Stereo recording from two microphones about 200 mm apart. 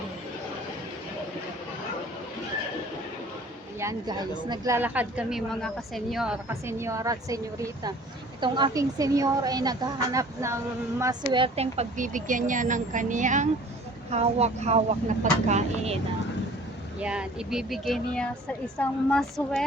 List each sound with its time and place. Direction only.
3.8 s a woman's voice: 15° right (ahead or behind); by 16.0 s 35° right (ahead or behind)
17.0 s speech: 5° right (ahead or behind)